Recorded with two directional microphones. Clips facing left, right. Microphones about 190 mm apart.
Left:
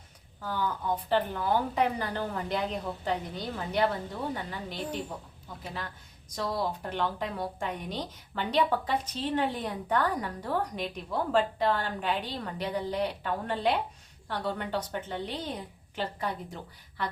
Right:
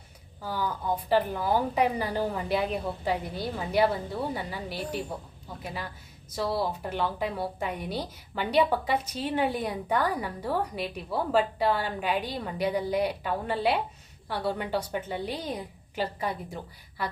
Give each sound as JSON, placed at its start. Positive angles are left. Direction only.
{"t": 0.4, "sound": "a woman's voice", "side_deg": -10}